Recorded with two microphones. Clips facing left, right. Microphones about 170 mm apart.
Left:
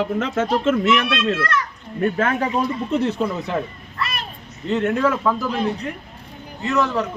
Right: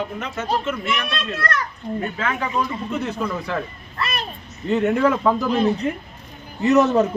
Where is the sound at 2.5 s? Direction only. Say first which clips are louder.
Left 3 dB; 30° left (ahead or behind).